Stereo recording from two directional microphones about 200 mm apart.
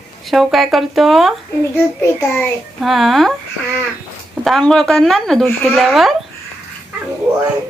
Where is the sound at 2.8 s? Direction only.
Centre (ahead or behind).